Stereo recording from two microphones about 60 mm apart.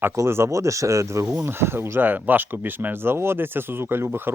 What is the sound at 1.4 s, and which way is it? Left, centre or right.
Speech, right.